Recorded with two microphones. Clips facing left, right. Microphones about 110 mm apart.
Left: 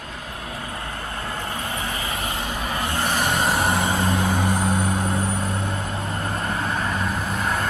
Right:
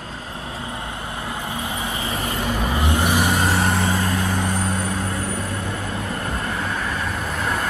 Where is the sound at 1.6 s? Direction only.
15° right (ahead or behind); by 5.1 s 20° left (ahead or behind).